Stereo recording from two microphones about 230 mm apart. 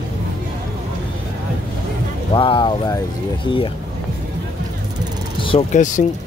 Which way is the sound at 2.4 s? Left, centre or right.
Left.